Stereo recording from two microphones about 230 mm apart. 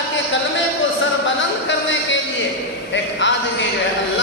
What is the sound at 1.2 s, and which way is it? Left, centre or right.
Speech, left.